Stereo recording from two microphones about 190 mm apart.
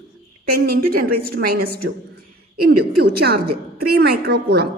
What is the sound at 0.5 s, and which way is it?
A woman's voice, 50° right (ahead or behind).